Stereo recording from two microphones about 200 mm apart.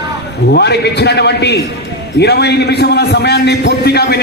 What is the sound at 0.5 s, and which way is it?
A man's voice, 55° left (ahead or behind).